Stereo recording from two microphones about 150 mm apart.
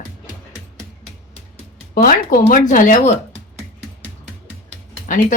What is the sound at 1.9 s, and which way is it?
Speech, 70° left (ahead or behind).